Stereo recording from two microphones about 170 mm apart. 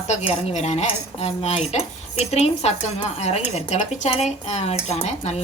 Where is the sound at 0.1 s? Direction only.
40° left (ahead or behind).